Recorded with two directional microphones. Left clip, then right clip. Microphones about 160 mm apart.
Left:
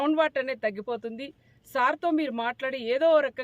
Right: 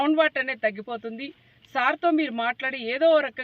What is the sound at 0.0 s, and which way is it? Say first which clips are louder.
Speech: right 3 dB; 30° left (ahead or behind).